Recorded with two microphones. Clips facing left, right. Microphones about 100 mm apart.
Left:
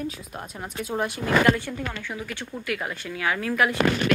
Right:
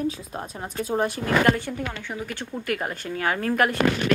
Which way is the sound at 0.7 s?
35° right (ahead or behind).